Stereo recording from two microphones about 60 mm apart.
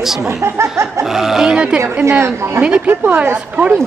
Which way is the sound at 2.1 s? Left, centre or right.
Right.